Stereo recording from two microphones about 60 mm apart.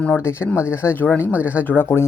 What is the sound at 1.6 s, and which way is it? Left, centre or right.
Speech, left.